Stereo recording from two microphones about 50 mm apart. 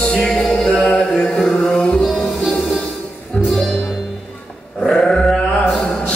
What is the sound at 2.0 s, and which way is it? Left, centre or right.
Music, centre.